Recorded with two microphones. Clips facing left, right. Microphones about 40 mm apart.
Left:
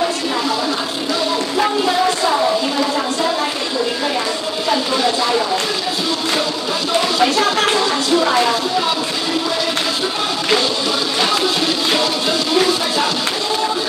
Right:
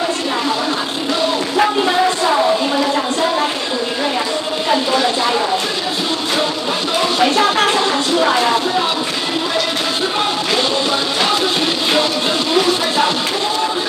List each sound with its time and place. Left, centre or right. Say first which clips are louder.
7.2 s music: right 3 dB; right